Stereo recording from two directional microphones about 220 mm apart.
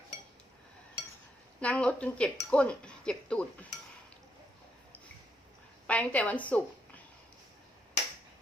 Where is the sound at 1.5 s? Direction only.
5° left (ahead or behind).